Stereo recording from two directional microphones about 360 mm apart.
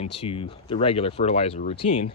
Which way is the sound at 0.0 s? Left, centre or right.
Centre.